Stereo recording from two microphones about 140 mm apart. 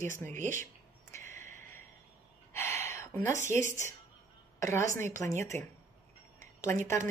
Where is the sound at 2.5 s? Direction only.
20° left (ahead or behind).